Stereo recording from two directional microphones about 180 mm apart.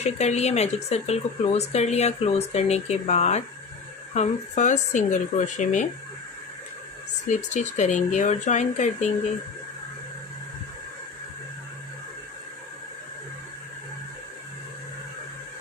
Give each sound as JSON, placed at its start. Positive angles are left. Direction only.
{"t": 0.0, "sound": "speech", "side_deg": 40}
{"t": 7.3, "sound": "speech", "side_deg": 40}